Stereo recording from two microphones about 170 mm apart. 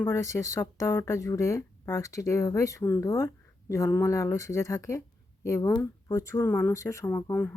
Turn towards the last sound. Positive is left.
turn(degrees=10)  # may be behind; listen again after turning